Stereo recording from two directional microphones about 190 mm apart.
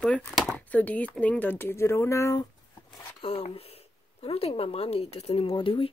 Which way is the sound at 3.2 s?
30° left (ahead or behind).